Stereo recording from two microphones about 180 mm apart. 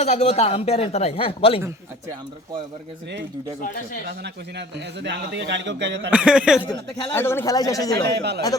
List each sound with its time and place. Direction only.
0.0 s speech: 35° left (ahead or behind)
1.6 s a man's voice: 20° right (ahead or behind)
3.6 s speech: 50° left (ahead or behind)
4.0 s a man's voice: 70° right (ahead or behind)
6.1 s speech: 5° right (ahead or behind)
6.6 s speech: 25° left (ahead or behind)
7.1 s speech: 15° left (ahead or behind)
8.0 s a man's voice: 70° right (ahead or behind)